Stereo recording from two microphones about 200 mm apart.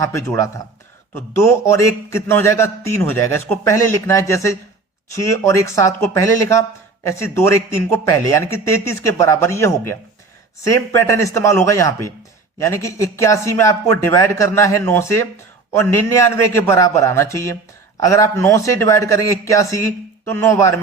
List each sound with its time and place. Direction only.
0.0 s a man's voice: 15° left (ahead or behind)